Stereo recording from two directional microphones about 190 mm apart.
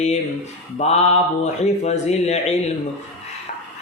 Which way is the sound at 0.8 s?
35° left (ahead or behind).